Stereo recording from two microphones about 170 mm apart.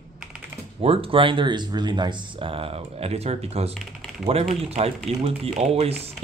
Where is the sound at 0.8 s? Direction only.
35° right (ahead or behind).